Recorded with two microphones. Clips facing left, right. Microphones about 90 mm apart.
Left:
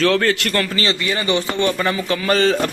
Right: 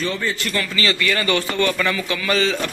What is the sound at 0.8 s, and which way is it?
Speech, 25° left (ahead or behind).